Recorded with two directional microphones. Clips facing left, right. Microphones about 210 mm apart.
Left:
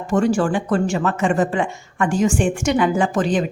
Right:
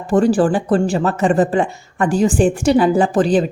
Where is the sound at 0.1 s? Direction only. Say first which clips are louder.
Right 4 dB; 35° right (ahead or behind).